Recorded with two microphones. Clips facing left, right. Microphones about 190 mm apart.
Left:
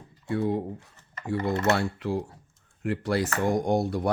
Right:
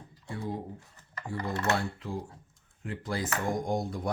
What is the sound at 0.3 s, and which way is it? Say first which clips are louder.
Speech: left 9 dB; 70° left (ahead or behind).